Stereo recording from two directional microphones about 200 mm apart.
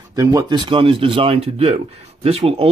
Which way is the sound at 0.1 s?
15° right (ahead or behind).